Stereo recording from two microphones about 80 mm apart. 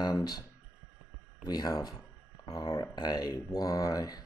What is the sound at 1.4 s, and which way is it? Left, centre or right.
Speech, left.